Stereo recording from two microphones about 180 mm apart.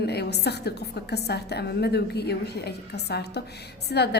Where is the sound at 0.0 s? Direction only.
65° left (ahead or behind).